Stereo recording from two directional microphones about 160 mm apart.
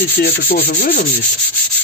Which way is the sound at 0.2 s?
85° left.